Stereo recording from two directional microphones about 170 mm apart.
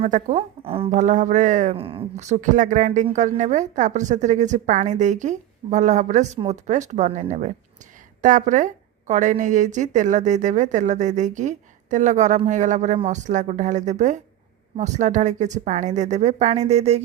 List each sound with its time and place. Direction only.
0.0 s a woman's voice: 45° right (ahead or behind)
0.6 s a woman's voice: 35° right (ahead or behind)
1.8 s a woman's voice: 35° right (ahead or behind)